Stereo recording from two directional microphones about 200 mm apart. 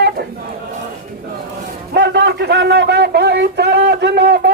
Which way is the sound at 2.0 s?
55° right (ahead or behind).